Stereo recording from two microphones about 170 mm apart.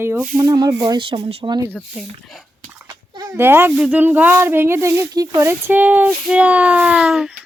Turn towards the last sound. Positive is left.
turn(degrees=-5)  # may be behind; listen again after turning